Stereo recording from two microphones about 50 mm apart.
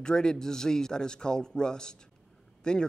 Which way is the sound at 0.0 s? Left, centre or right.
Centre.